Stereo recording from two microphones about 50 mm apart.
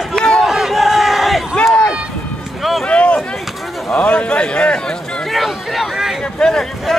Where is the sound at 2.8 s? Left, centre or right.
Left.